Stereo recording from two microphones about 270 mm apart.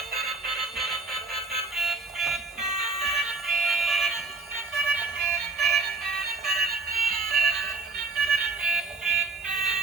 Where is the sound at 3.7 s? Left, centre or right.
Centre.